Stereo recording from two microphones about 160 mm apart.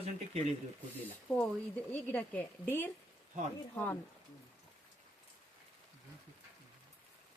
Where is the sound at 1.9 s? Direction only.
10° left (ahead or behind).